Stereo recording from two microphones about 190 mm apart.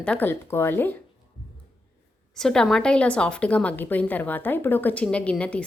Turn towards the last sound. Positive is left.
turn(degrees=5)  # may be behind; listen again after turning